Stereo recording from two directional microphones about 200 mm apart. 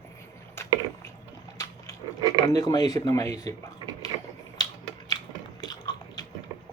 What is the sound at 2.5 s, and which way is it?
Speech, 15° left (ahead or behind).